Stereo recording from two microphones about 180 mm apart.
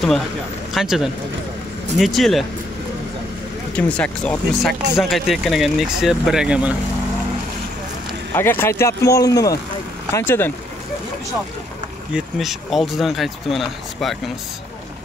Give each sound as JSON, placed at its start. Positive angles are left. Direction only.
{"t": 0.7, "sound": "speech", "side_deg": 0}
{"t": 3.7, "sound": "speech", "side_deg": 5}
{"t": 8.4, "sound": "speech", "side_deg": 10}
{"t": 12.4, "sound": "speech", "side_deg": 0}